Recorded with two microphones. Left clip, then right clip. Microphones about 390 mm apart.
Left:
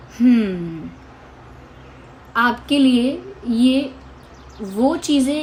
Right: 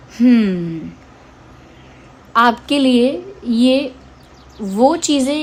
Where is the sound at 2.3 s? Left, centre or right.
Right.